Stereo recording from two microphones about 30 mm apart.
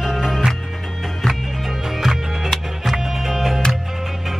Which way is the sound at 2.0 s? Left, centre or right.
Centre.